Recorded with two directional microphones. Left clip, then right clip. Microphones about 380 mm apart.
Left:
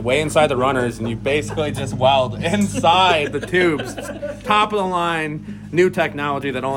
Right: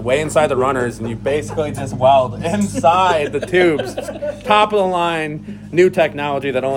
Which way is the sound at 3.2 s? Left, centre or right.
Centre.